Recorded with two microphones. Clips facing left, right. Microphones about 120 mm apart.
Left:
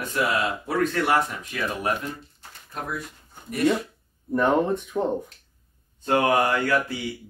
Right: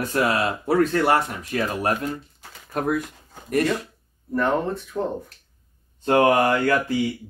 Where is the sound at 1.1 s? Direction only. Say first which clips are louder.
Right 2 dB; 40° right (ahead or behind).